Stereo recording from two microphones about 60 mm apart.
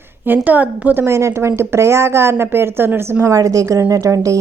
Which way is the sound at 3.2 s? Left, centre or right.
Right.